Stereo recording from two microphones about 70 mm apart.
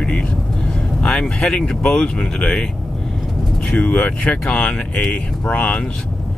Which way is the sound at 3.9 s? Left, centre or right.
Centre.